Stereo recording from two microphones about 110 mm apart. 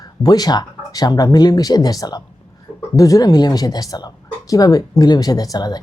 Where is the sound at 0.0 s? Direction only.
35° left (ahead or behind).